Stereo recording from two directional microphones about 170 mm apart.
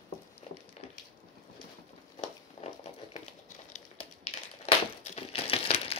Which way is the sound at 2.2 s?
40° left (ahead or behind).